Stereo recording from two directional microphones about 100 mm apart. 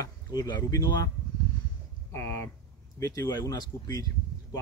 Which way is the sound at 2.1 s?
25° left (ahead or behind).